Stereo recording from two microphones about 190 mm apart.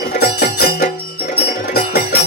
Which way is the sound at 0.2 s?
55° left (ahead or behind).